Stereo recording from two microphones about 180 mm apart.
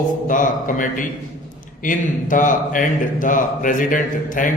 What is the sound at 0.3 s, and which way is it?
A man's voice, 45° left (ahead or behind).